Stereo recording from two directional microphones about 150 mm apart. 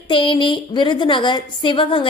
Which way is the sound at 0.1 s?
35° left (ahead or behind).